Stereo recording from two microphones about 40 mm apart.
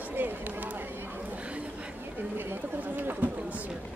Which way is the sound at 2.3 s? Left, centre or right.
Right.